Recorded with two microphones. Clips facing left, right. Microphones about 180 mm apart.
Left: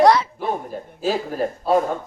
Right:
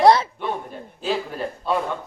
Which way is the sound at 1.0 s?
45° left (ahead or behind).